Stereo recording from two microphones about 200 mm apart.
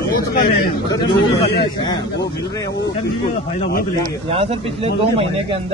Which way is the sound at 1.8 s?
20° left (ahead or behind).